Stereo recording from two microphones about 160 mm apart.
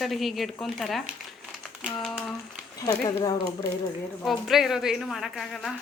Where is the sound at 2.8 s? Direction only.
20° left (ahead or behind).